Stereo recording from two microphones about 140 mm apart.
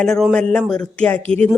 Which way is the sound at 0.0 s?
5° left (ahead or behind).